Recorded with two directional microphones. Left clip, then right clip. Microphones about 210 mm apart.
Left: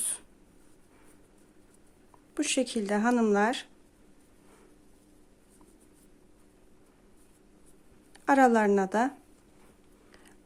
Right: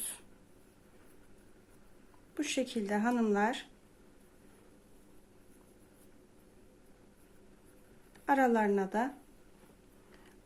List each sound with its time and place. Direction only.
2.3 s a woman's voice: 25° left (ahead or behind)
8.1 s a woman's voice: 30° left (ahead or behind)